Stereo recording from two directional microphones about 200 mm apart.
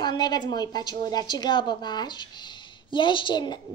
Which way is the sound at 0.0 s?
20° left (ahead or behind).